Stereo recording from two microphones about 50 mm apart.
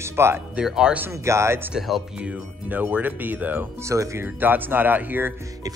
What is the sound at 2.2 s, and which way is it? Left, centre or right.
Speech, right.